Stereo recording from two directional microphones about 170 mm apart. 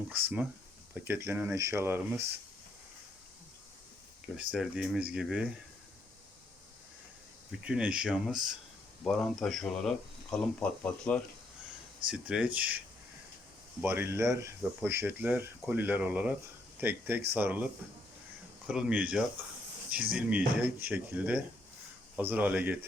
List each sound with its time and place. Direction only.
0.1 s speech: 10° right (ahead or behind)
4.5 s speech: 5° right (ahead or behind)
7.6 s speech: 5° right (ahead or behind)
12.1 s speech: 5° right (ahead or behind)
13.8 s speech: 15° right (ahead or behind)
18.7 s speech: 5° right (ahead or behind)